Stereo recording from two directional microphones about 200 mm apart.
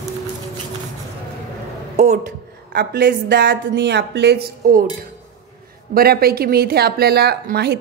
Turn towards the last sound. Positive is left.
turn(degrees=-50)  # may be behind; listen again after turning